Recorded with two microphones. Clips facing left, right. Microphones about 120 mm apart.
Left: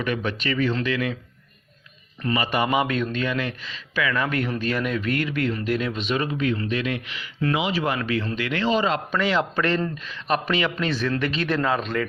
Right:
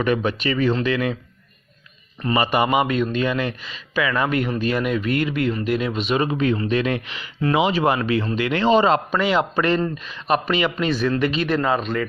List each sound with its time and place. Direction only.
0.0 s speech: 30° right (ahead or behind)
2.2 s speech: 25° right (ahead or behind)
2.6 s speech: 5° right (ahead or behind)
3.2 s speech: 20° right (ahead or behind)
4.3 s speech: 10° right (ahead or behind)
6.3 s speech: 30° right (ahead or behind)
9.1 s speech: 10° right (ahead or behind)
10.3 s a man's voice: 5° right (ahead or behind)